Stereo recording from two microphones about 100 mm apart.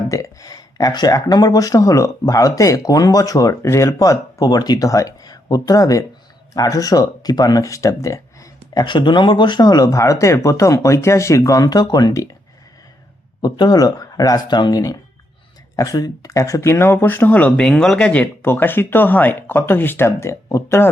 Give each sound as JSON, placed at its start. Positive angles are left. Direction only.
{"t": 0.1, "sound": "speech", "side_deg": 35}
{"t": 8.8, "sound": "speech", "side_deg": 50}
{"t": 13.4, "sound": "speech", "side_deg": 40}